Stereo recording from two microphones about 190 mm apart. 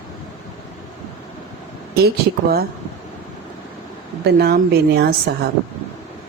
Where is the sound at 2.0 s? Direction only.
55° right (ahead or behind).